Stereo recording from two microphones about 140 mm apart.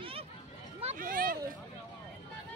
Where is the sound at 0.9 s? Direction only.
85° right.